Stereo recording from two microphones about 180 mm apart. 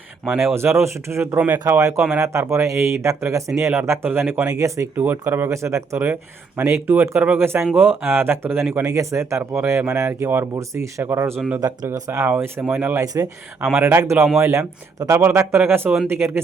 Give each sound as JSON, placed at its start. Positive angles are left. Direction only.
{"t": 0.3, "sound": "speech", "side_deg": -15}
{"t": 11.6, "sound": "speech", "side_deg": -20}